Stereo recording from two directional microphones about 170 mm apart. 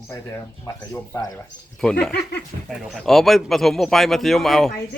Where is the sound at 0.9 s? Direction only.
20° left (ahead or behind).